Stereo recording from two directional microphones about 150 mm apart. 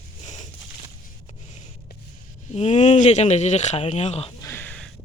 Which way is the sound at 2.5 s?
50° left (ahead or behind).